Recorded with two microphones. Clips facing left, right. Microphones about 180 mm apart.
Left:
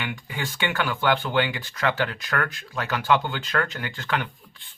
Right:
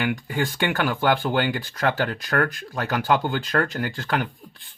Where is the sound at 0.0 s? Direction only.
45° right (ahead or behind).